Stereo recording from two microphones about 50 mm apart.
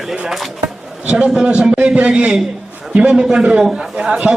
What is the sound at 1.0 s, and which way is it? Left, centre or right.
A man's voice, centre.